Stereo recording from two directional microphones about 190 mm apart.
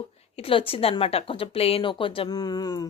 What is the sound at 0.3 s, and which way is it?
Speech, 30° left (ahead or behind).